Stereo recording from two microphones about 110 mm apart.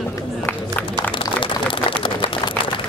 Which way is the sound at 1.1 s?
50° left (ahead or behind).